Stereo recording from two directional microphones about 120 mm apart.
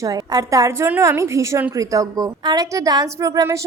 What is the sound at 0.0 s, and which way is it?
A woman's voice, 30° right (ahead or behind).